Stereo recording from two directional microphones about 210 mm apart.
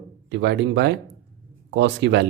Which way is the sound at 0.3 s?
55° right (ahead or behind).